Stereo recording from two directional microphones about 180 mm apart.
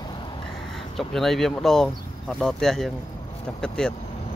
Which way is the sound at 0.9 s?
Centre (ahead or behind).